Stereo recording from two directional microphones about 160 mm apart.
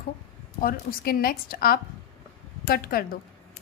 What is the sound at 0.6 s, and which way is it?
A woman's voice, 65° left (ahead or behind).